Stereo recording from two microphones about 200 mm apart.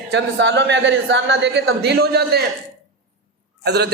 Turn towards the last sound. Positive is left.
turn(degrees=-55)  # may be behind; listen again after turning